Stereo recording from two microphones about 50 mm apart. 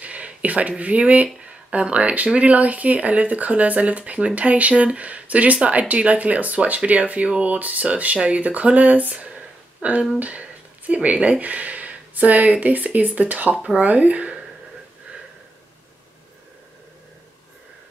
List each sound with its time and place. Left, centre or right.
0.0 s speech: right